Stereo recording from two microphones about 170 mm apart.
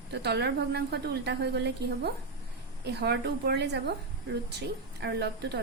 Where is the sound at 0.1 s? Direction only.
80° right.